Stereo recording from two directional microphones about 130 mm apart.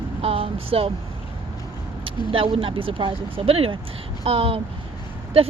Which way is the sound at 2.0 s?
40° right (ahead or behind).